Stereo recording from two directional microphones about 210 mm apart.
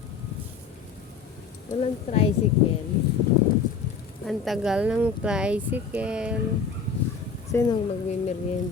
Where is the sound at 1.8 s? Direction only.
30° left (ahead or behind).